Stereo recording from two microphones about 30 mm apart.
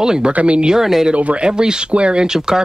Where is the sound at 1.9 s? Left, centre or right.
Right.